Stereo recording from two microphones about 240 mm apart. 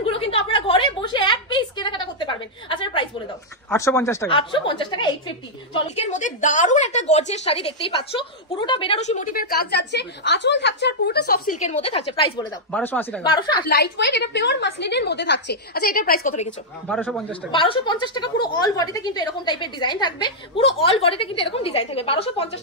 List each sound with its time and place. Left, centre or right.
0.0 s a sound: left
3.7 s a woman's voice: centre
12.7 s speech: centre
13.2 s a woman's voice: centre
13.7 s a woman's voice: left
16.8 s speech: centre
17.5 s a woman's voice: left